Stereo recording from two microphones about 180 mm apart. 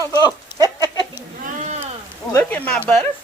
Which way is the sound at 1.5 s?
40° right (ahead or behind).